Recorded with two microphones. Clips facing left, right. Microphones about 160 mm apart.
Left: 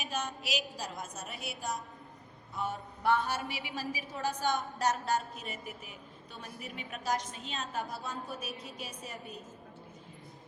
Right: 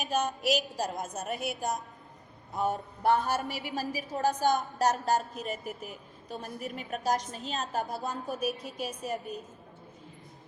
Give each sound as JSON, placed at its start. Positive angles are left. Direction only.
{"t": 0.0, "sound": "a woman's voice", "side_deg": -45}